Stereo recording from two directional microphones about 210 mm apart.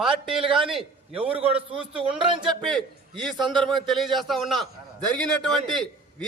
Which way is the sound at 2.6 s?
Centre (ahead or behind).